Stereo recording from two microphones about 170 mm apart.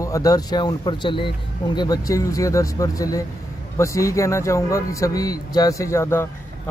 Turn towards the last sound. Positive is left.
turn(degrees=15)  # may be behind; listen again after turning